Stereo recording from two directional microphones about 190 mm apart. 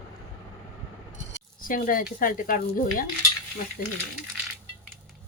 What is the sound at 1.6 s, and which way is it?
Speech, 45° left (ahead or behind).